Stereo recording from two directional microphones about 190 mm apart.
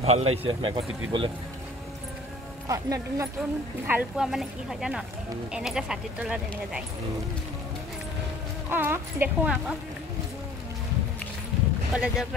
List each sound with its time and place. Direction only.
0.0 s speech: 35° right (ahead or behind)
2.7 s speech: 15° right (ahead or behind)
3.8 s speech: 5° right (ahead or behind)
8.6 s speech: 10° right (ahead or behind)
11.9 s speech: centre (ahead or behind)